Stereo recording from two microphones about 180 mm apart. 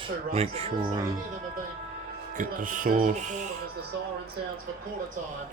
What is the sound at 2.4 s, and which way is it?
Speech, 45° right (ahead or behind).